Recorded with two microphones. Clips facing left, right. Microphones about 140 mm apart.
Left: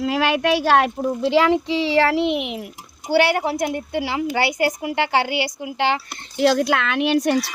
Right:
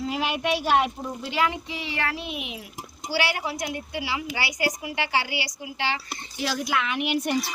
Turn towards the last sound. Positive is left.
turn(degrees=85)